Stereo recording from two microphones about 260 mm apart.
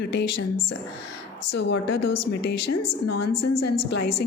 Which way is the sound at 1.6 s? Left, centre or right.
Left.